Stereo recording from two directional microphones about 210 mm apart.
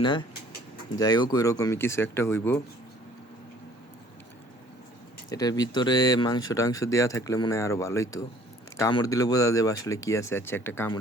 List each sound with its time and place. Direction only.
0.0 s speech: 20° left (ahead or behind)
5.3 s speech: 20° left (ahead or behind)